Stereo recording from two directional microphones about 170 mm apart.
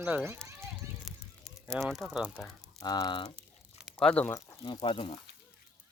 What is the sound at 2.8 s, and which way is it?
Speech, 25° left (ahead or behind).